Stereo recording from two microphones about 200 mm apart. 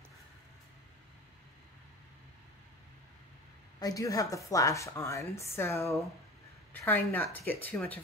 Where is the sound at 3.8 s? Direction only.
15° left (ahead or behind).